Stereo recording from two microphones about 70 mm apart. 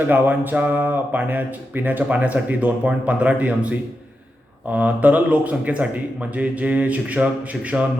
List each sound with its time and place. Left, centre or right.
0.1 s speech: right